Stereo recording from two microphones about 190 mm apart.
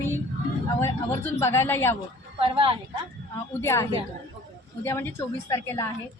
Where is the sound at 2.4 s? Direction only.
30° right (ahead or behind).